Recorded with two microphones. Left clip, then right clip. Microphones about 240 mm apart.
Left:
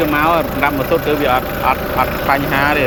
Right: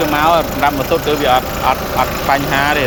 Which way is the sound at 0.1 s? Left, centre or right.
Centre.